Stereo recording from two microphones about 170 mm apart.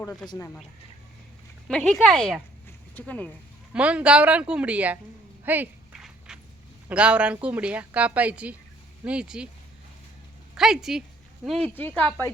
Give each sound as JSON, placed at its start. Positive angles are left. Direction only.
{"t": 0.0, "sound": "speech", "side_deg": 10}
{"t": 1.9, "sound": "speech", "side_deg": 5}
{"t": 3.7, "sound": "a woman's voice", "side_deg": -5}
{"t": 5.5, "sound": "walk", "side_deg": -5}
{"t": 6.8, "sound": "a woman's voice", "side_deg": -5}
{"t": 10.5, "sound": "speech", "side_deg": -5}